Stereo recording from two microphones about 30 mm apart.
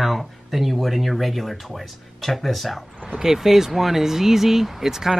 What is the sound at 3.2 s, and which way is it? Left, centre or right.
Speech, centre.